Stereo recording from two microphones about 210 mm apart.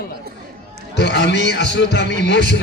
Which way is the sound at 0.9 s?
55° left (ahead or behind).